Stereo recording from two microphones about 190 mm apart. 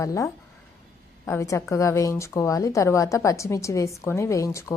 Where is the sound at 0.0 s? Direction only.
15° left (ahead or behind).